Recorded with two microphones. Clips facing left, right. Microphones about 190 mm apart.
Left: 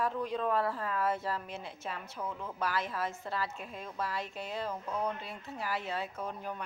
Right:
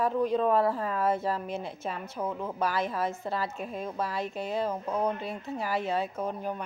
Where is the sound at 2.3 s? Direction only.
45° right (ahead or behind).